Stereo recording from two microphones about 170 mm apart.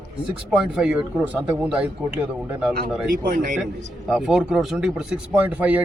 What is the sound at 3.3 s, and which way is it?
Speech, 55° right (ahead or behind).